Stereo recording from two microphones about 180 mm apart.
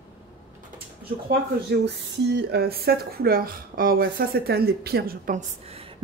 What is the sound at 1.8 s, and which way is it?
Speech, 70° right (ahead or behind).